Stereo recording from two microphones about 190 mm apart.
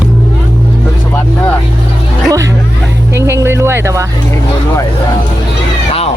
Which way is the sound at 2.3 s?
15° right (ahead or behind).